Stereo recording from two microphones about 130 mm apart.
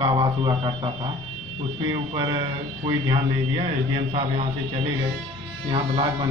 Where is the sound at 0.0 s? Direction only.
35° right (ahead or behind).